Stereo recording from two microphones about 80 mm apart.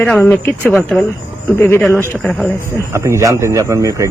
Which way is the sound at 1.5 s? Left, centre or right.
Left.